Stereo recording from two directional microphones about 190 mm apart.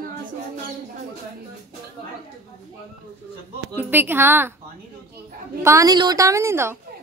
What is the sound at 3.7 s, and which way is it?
Speech, 10° right (ahead or behind).